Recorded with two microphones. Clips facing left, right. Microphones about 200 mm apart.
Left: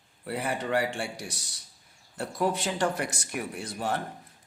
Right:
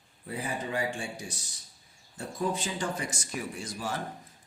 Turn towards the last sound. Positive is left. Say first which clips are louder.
# left 4 dB
turn(degrees=60)  # may be behind; listen again after turning